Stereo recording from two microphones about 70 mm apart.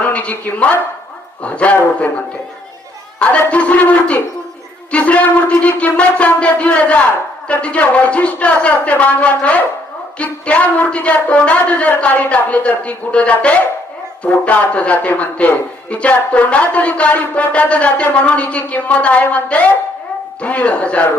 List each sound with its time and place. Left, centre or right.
0.0 s a man's voice: centre
4.9 s a sound: centre
8.6 s a man's voice: centre